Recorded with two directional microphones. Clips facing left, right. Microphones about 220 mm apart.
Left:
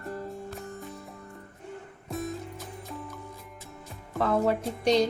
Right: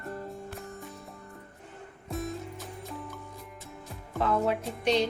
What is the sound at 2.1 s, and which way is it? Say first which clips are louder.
Music: left 1 dB; centre (ahead or behind).